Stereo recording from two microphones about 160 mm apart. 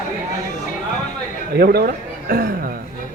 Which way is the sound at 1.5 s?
75° right (ahead or behind).